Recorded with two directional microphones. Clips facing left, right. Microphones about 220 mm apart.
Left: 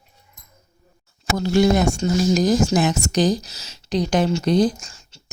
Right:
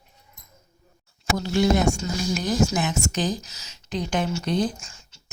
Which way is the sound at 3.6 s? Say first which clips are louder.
Left 7 dB; 90° left.